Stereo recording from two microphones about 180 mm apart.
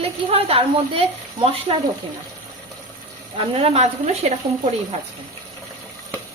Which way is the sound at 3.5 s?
35° right (ahead or behind).